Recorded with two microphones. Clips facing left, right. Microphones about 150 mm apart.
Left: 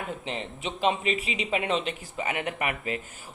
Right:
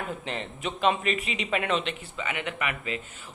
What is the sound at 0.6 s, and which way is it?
Speech, 30° left (ahead or behind).